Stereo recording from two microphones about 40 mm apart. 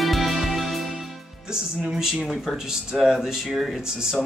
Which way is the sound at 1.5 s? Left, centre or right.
Centre.